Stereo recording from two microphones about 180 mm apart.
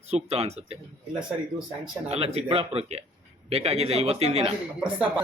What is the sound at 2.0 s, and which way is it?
Speech, 35° right (ahead or behind).